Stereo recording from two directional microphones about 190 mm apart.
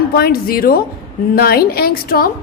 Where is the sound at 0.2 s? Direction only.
55° left (ahead or behind).